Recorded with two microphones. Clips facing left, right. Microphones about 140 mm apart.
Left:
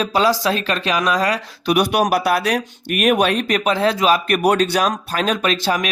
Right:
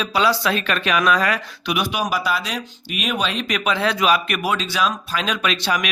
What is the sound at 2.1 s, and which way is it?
Speech, 65° left (ahead or behind).